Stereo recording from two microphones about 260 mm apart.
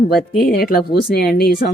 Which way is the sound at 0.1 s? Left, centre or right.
Left.